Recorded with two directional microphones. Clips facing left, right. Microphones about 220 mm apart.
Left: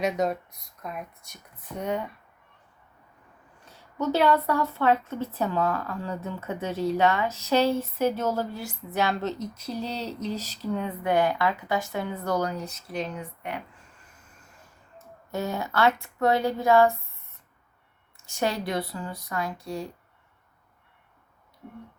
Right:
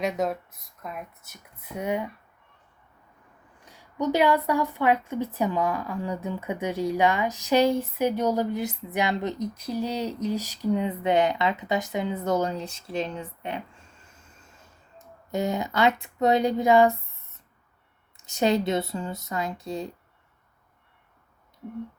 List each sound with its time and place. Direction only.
0.0 s speech: centre (ahead or behind)
3.7 s a woman's voice: 15° right (ahead or behind)
15.3 s a woman's voice: 15° right (ahead or behind)
18.2 s speech: 20° right (ahead or behind)